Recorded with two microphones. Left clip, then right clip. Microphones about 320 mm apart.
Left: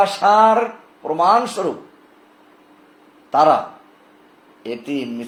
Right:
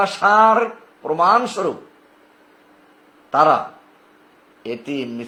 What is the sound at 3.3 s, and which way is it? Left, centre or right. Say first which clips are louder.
Speech: left 1 dB; right.